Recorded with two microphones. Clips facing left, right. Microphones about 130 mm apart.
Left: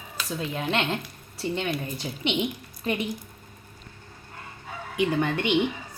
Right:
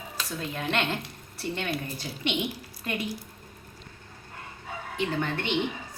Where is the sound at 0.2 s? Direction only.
15° left (ahead or behind).